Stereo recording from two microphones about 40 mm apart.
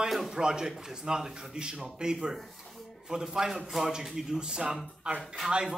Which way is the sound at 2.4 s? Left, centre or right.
Centre.